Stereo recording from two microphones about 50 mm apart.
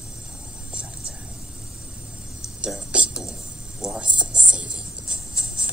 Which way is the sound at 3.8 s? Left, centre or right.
Centre.